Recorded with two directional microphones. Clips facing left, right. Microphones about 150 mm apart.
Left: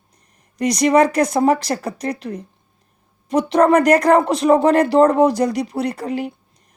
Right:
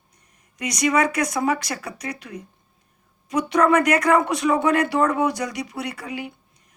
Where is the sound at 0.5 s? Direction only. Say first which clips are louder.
Left 7 dB; 35° left (ahead or behind).